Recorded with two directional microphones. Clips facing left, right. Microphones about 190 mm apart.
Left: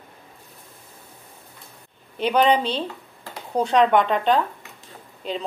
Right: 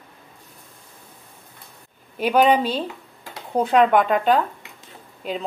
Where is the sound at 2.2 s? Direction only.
5° right (ahead or behind).